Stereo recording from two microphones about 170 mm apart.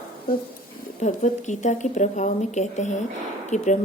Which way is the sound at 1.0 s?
45° left (ahead or behind).